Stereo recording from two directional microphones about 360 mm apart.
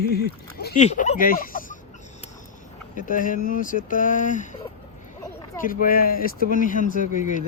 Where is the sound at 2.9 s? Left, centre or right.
Left.